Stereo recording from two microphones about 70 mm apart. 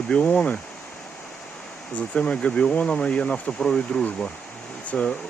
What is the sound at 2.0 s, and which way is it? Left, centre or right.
Speech, centre.